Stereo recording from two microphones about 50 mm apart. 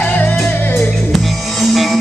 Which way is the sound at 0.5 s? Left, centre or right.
Left.